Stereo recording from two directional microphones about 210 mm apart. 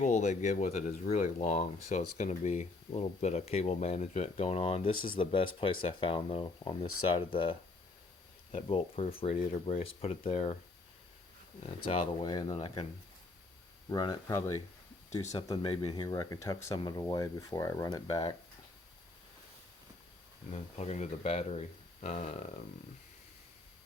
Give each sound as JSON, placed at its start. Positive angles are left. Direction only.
{"t": 0.0, "sound": "speech", "side_deg": 35}
{"t": 8.5, "sound": "speech", "side_deg": 25}
{"t": 11.6, "sound": "speech", "side_deg": 25}
{"t": 13.9, "sound": "speech", "side_deg": 20}
{"t": 20.7, "sound": "speech", "side_deg": 30}